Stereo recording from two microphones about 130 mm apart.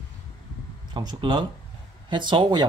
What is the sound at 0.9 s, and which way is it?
Speech, 35° right (ahead or behind).